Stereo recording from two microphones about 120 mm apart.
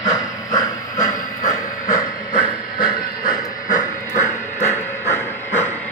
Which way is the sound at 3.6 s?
90° left.